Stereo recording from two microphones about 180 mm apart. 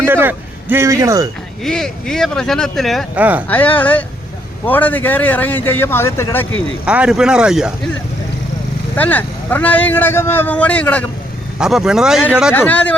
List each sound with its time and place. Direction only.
0.0 s speech: 10° right (ahead or behind)
1.6 s a man's voice: 5° left (ahead or behind)
6.8 s speech: 5° right (ahead or behind)
9.0 s a man's voice: 10° left (ahead or behind)
11.6 s speech: 5° right (ahead or behind)
12.5 s a man's voice: 10° left (ahead or behind)